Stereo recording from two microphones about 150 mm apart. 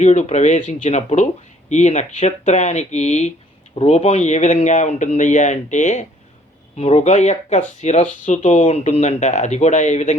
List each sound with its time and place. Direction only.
0.0 s a man's voice: 50° left (ahead or behind)
8.7 s a man's voice: 50° left (ahead or behind)